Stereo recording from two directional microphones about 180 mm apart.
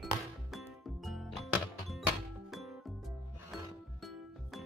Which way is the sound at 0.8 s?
Centre (ahead or behind).